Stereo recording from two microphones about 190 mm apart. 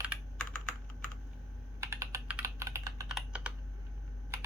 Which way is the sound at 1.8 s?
15° right (ahead or behind).